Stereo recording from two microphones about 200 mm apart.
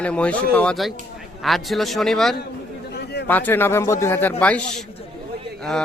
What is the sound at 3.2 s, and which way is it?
Speech, 10° left (ahead or behind).